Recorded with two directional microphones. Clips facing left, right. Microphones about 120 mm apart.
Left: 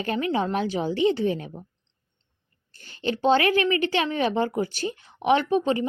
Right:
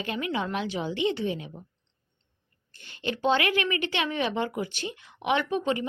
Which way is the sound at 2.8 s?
35° left (ahead or behind).